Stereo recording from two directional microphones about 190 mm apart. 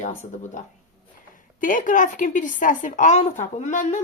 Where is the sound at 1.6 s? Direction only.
45° left (ahead or behind).